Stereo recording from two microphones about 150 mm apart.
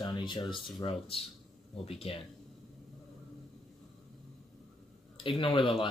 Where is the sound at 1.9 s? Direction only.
40° left (ahead or behind).